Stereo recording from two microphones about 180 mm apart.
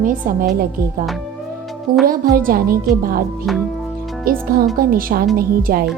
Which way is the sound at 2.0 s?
55° right (ahead or behind).